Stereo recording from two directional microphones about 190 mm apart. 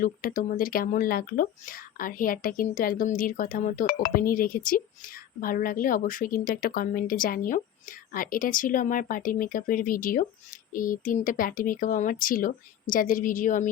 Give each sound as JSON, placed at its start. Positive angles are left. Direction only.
{"t": 0.0, "sound": "speech", "side_deg": 45}